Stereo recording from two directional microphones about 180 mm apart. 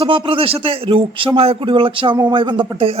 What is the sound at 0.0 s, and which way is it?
A man's voice, 30° right (ahead or behind).